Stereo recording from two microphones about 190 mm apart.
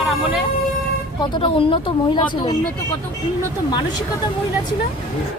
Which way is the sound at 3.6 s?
20° left (ahead or behind).